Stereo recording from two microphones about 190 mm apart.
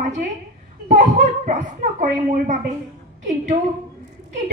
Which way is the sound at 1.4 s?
45° right (ahead or behind).